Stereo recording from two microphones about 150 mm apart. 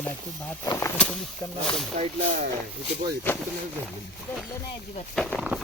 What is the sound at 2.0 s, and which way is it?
Speech, 45° right (ahead or behind).